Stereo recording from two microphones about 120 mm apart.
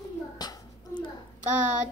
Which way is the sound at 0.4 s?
35° left (ahead or behind).